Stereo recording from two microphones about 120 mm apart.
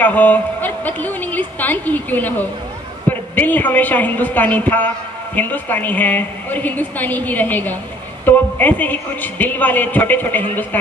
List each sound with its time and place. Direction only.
0.0 s a woman's voice: 15° left (ahead or behind)